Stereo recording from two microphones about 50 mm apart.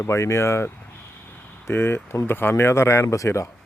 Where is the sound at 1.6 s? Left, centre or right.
Left.